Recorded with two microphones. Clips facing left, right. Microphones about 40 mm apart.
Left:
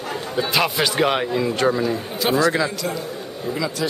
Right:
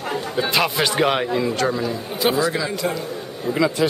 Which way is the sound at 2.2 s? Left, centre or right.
Centre.